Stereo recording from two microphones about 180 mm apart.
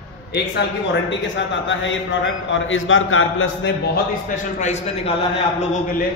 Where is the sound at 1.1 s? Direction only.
90° left.